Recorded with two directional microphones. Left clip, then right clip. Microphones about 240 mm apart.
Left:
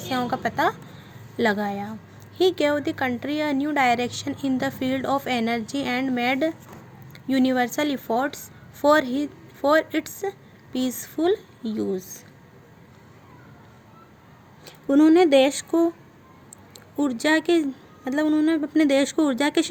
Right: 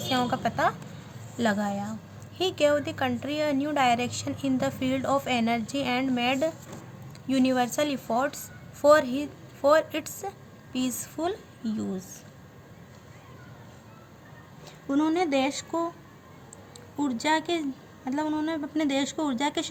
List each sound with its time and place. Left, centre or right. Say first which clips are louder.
0.1 s a woman's voice: left 2 dB; centre
14.8 s speech: left 9 dB; left
17.0 s a woman's voice: left 4 dB; left